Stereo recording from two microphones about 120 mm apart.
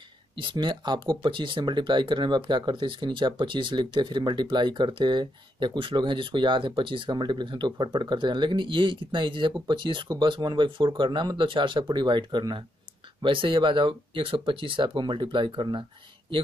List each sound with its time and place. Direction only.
0.4 s speech: 40° right (ahead or behind)